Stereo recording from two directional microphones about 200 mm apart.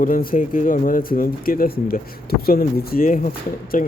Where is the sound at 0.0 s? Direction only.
45° left (ahead or behind).